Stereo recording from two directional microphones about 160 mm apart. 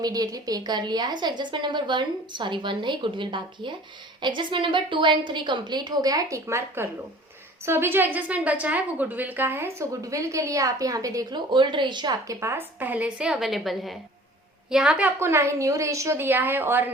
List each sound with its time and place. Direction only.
0.0 s a woman's voice: 25° right (ahead or behind)